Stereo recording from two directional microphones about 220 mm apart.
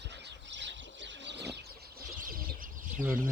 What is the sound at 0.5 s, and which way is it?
Bird, 55° right (ahead or behind).